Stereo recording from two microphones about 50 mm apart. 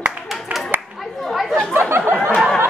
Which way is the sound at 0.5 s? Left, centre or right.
Right.